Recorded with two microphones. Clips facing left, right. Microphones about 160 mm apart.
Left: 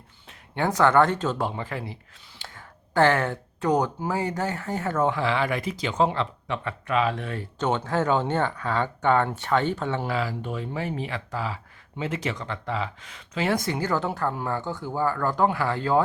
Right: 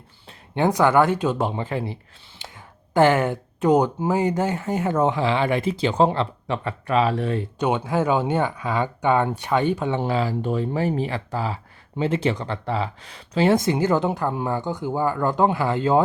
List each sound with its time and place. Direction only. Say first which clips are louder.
0.5 s speech: right 2 dB; 15° right (ahead or behind); by 7.4 s 30° right (ahead or behind)
7.6 s speech: right 2 dB; 10° right (ahead or behind)